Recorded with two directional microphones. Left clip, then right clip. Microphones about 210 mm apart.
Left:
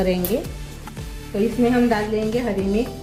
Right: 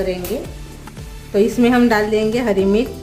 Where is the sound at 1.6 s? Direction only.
45° right (ahead or behind).